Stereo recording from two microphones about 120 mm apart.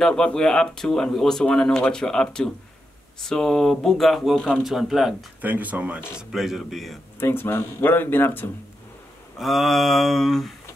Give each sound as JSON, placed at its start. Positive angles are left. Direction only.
{"t": 0.0, "sound": "speech", "side_deg": 5}
{"t": 5.4, "sound": "a man's voice", "side_deg": -15}
{"t": 7.2, "sound": "speech", "side_deg": 20}
{"t": 9.4, "sound": "speech", "side_deg": 0}